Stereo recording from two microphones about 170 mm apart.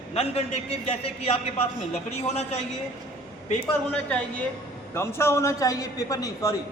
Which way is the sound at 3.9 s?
5° left (ahead or behind).